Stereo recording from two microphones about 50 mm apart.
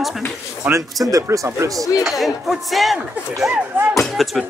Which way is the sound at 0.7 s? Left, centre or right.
Right.